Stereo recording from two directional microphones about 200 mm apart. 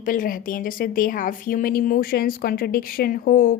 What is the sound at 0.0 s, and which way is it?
Speech, 45° left (ahead or behind).